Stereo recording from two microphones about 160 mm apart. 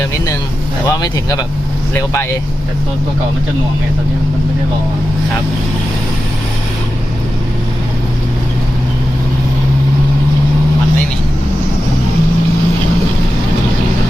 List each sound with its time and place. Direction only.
0.9 s speech: 20° left (ahead or behind)